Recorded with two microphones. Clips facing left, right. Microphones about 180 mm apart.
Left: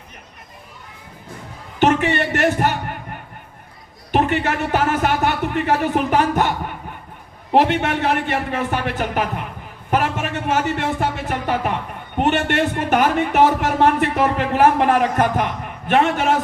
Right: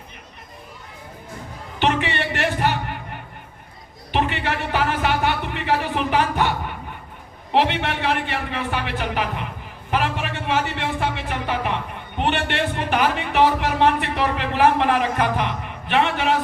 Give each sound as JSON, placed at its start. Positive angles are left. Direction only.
{"t": 1.8, "sound": "a sound", "side_deg": 45}
{"t": 4.1, "sound": "music", "side_deg": 45}
{"t": 7.5, "sound": "speech", "side_deg": 45}